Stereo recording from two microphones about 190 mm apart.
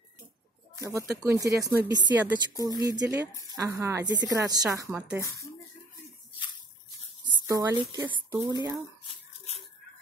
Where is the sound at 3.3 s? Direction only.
15° left (ahead or behind).